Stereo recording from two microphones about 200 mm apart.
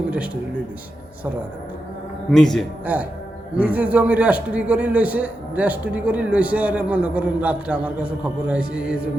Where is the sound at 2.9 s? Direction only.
10° right (ahead or behind).